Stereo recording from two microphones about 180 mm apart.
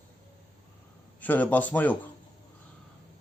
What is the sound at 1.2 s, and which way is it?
Speech, 10° left (ahead or behind).